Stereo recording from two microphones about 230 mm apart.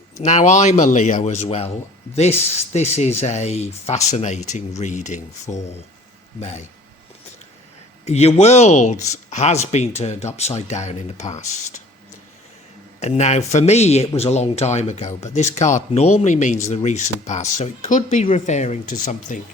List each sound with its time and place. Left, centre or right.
0.2 s speech: left
2.7 s speech: left
8.0 s speech: left
13.0 s speech: left